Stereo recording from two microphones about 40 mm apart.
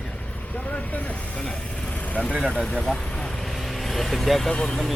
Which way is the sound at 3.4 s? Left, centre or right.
Centre.